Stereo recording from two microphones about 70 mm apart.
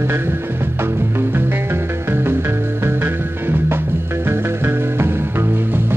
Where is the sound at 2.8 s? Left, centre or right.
Right.